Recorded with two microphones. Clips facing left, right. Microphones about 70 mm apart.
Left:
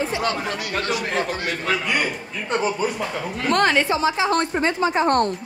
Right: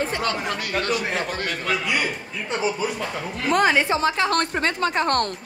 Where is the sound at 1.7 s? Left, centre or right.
Left.